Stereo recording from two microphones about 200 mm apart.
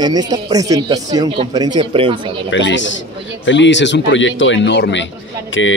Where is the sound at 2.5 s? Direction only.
65° left (ahead or behind).